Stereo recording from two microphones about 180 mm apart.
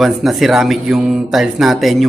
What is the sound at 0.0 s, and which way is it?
Speech, centre (ahead or behind).